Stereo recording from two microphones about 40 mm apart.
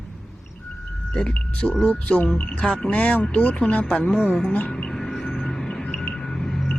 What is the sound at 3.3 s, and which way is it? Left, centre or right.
Speech, left.